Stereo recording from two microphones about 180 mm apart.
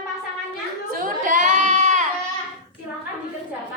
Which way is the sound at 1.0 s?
50° right (ahead or behind).